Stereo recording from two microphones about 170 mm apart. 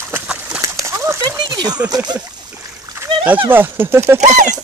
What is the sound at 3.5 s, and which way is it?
Speech, 10° right (ahead or behind).